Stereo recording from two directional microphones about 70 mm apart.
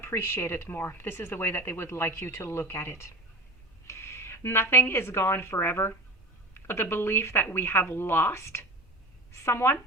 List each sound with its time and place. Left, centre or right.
0.0 s a woman's voice: left